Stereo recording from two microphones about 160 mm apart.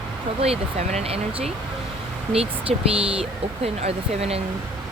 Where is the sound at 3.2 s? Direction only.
40° right (ahead or behind).